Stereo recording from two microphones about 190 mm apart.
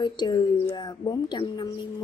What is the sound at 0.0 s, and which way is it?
A woman's voice, 25° left (ahead or behind).